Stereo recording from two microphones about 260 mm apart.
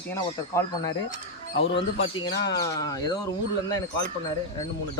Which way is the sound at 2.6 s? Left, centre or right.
Centre.